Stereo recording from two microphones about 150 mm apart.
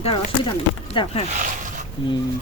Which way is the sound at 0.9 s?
35° left (ahead or behind).